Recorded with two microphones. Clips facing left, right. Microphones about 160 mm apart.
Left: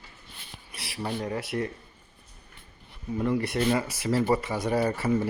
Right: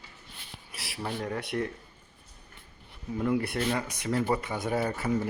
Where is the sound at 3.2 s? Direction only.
Centre (ahead or behind).